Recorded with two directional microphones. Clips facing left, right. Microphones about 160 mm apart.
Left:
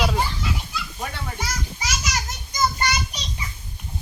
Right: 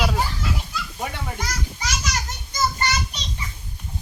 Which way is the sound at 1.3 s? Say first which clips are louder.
Even; 10° left (ahead or behind).